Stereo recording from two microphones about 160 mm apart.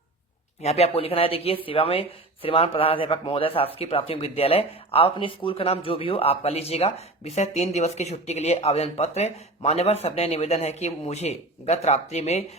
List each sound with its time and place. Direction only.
0.6 s speech: 40° left (ahead or behind)